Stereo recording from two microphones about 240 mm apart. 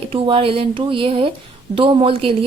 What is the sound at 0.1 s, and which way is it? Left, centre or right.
A woman's voice, right.